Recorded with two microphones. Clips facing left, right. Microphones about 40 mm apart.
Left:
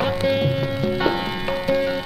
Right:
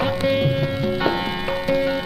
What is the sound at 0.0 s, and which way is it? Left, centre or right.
Music, centre.